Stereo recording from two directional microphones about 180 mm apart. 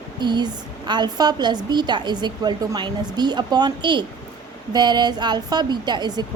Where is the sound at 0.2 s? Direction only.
25° right (ahead or behind).